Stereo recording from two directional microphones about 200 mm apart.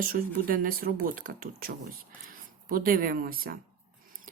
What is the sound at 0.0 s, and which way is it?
Speech, 45° right (ahead or behind).